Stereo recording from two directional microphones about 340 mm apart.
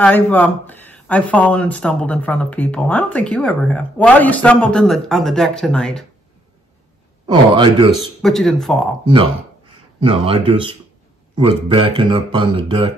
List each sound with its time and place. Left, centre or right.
0.0 s speech: centre
7.2 s speech: centre
7.9 s speech: centre
9.9 s speech: centre